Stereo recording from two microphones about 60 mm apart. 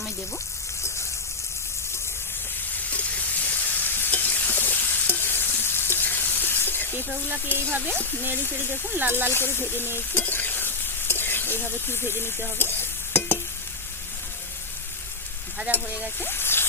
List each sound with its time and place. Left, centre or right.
2.9 s frying: left
7.8 s speech: centre
9.0 s speech: right
9.3 s sizzle: left
12.5 s stir: left
15.7 s stir: right
16.2 s a sound: left